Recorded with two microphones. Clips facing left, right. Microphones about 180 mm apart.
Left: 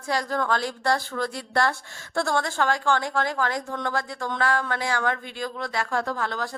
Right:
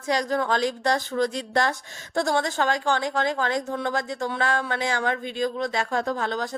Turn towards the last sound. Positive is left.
turn(degrees=-20)  # may be behind; listen again after turning